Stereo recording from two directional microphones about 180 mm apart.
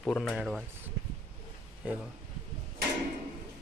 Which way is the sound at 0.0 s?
5° left (ahead or behind).